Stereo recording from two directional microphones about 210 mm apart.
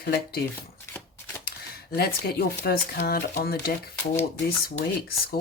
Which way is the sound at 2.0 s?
45° left (ahead or behind).